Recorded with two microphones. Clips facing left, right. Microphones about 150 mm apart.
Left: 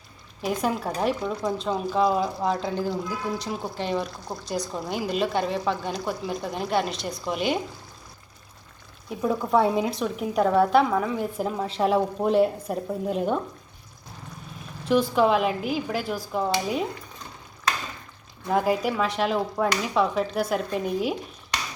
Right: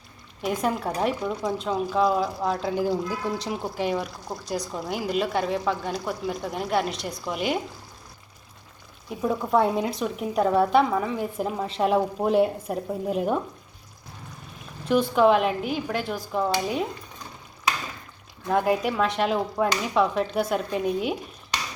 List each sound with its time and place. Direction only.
0.4 s speech: centre (ahead or behind)
9.0 s speech: centre (ahead or behind)
14.8 s speech: centre (ahead or behind)
18.4 s speech: centre (ahead or behind)